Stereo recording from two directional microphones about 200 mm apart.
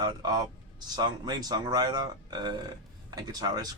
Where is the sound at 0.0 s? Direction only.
20° right (ahead or behind).